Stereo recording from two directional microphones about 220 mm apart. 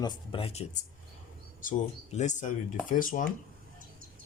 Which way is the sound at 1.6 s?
35° left (ahead or behind).